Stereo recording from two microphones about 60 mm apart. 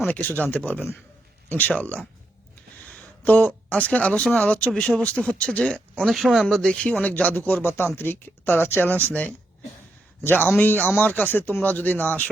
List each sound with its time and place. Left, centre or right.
0.1 s speech: left
3.2 s speech: left
6.0 s speech: centre
6.4 s speech: centre; by 9.0 s left
10.2 s speech: left